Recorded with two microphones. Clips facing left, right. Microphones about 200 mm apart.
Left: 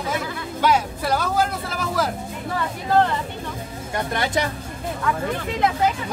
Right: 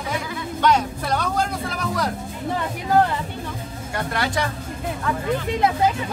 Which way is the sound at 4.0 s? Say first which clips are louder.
Left 1 dB; 20° left (ahead or behind).